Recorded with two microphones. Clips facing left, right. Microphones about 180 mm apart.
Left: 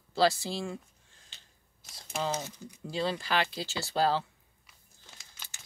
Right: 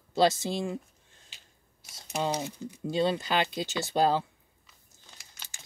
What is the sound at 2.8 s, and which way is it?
Speech, 25° right (ahead or behind).